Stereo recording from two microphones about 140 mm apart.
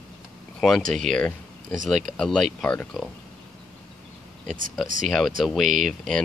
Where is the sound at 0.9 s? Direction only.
5° left (ahead or behind).